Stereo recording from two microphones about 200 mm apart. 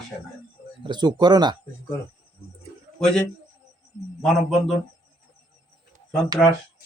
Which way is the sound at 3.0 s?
5° left (ahead or behind).